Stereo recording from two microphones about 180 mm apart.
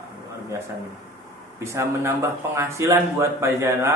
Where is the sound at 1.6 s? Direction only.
15° right (ahead or behind).